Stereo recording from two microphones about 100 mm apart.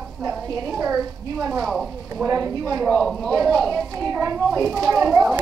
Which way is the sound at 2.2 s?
35° right (ahead or behind).